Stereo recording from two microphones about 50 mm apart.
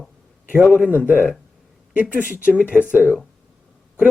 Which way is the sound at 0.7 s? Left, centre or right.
Right.